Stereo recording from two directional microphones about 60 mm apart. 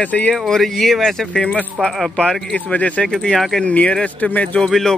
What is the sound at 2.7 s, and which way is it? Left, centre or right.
Speech, left.